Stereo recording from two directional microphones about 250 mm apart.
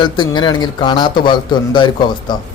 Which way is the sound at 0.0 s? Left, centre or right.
Centre.